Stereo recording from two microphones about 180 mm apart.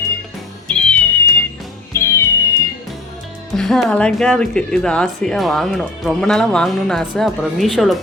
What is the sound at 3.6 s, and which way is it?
A woman's voice, centre (ahead or behind).